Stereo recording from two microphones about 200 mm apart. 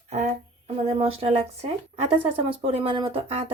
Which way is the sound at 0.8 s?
30° right (ahead or behind).